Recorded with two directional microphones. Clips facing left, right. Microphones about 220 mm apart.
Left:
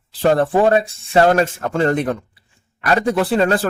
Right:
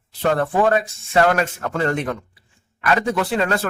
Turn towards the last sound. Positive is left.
turn(degrees=35)  # may be behind; listen again after turning